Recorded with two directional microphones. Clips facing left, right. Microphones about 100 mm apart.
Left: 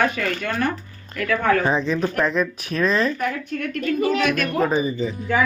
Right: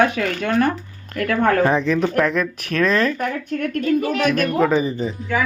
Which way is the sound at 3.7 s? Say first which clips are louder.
Right 1 dB; 45° right (ahead or behind).